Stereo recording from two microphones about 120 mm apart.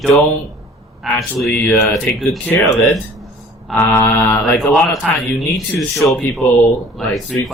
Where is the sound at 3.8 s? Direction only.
15° left (ahead or behind).